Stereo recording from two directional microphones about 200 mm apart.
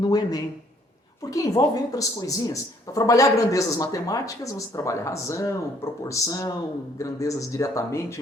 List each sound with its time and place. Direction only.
0.0 s speech: 20° left (ahead or behind)